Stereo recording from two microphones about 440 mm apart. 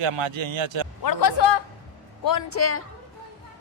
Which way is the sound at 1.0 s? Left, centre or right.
Left.